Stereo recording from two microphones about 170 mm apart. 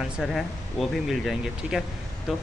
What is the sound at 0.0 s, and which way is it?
Speech, centre (ahead or behind).